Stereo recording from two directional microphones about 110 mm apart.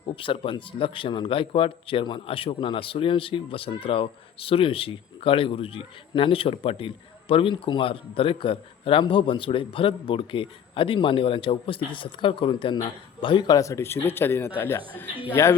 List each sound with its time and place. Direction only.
0.0 s a man's voice: 55° left (ahead or behind)
13.6 s speech: 25° left (ahead or behind)